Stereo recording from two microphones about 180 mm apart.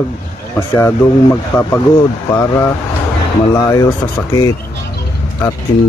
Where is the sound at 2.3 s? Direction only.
15° left (ahead or behind).